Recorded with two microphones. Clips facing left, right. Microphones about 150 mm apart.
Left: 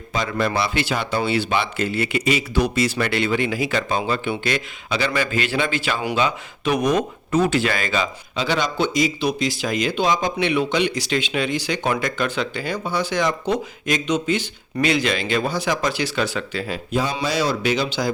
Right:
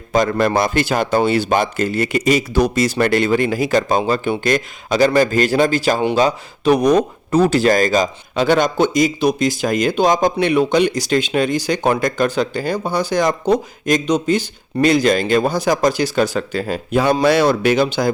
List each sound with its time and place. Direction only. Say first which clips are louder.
0.1 s speech: right 7 dB; 45° right (ahead or behind)
16.9 s speech: right 9 dB; 60° right (ahead or behind)